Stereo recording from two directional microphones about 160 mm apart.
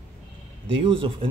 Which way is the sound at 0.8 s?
35° right (ahead or behind).